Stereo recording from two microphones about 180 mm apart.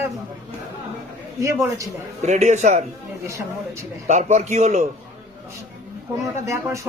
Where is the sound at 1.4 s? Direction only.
15° right (ahead or behind).